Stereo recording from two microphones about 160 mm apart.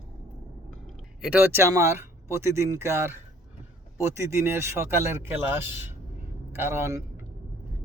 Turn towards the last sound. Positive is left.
turn(degrees=-15)  # may be behind; listen again after turning